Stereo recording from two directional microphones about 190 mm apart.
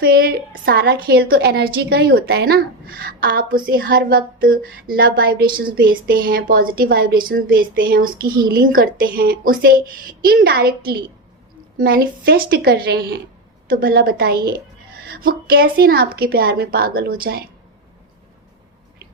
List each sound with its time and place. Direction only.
0.0 s a woman's voice: 50° right (ahead or behind)